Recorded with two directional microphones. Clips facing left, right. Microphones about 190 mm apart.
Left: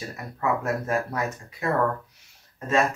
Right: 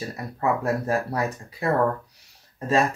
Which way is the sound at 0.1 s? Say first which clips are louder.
Right 1 dB; 35° right (ahead or behind).